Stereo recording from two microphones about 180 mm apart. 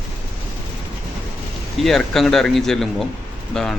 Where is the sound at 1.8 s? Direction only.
Centre (ahead or behind).